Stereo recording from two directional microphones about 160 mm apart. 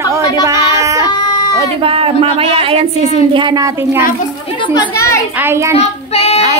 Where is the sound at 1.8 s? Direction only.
35° right (ahead or behind); by 4.1 s 15° right (ahead or behind).